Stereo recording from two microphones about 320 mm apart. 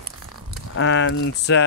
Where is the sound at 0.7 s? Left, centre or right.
Left.